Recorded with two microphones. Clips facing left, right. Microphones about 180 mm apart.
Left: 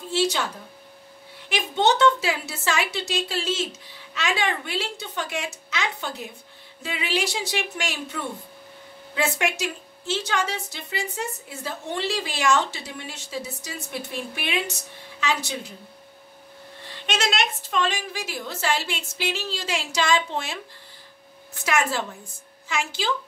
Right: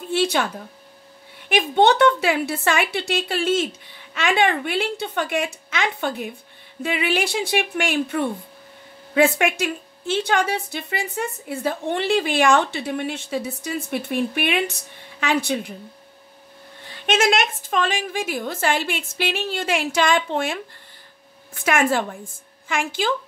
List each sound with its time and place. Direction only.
0.1 s speech: 55° right (ahead or behind)
1.5 s a woman's voice: 55° right (ahead or behind)
16.9 s a woman's voice: 50° right (ahead or behind)